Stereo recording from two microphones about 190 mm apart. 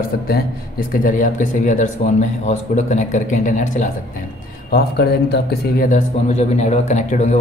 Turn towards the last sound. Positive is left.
turn(degrees=40)  # may be behind; listen again after turning